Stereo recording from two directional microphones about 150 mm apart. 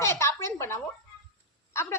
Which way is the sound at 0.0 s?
20° left (ahead or behind).